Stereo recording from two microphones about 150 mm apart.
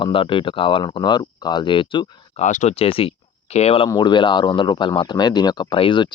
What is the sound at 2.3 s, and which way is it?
Speech, 55° left (ahead or behind).